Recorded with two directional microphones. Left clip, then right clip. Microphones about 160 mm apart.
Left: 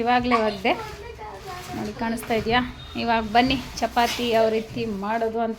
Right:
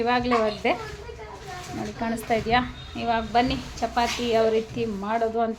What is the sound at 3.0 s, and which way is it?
A woman's voice, 25° left (ahead or behind).